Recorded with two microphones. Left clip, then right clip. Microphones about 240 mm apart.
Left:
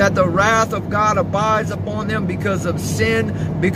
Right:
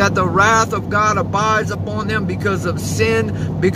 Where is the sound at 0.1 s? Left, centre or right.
Right.